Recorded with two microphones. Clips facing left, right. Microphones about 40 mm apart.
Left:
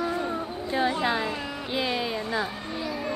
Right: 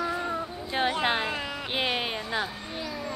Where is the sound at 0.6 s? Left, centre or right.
Right.